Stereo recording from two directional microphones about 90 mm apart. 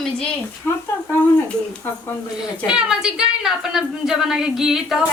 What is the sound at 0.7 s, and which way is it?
Speech, 25° left (ahead or behind).